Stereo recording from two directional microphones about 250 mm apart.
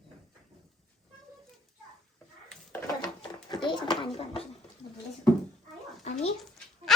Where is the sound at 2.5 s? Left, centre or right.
Centre.